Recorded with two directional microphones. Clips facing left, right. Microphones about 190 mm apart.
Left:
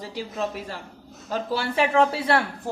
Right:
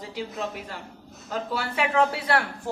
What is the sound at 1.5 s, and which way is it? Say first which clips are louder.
Speech: left 4 dB; 30° left (ahead or behind).